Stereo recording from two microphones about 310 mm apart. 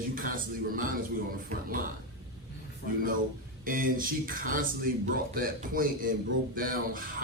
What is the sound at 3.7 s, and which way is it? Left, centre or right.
Speech, right.